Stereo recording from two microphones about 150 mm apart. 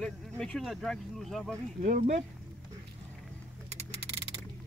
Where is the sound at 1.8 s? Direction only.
55° right (ahead or behind).